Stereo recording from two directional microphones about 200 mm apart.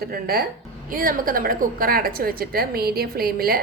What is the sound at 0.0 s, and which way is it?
A woman's voice, 50° right (ahead or behind).